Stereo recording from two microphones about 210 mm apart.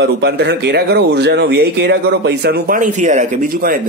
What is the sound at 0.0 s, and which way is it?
Speech, 55° right (ahead or behind).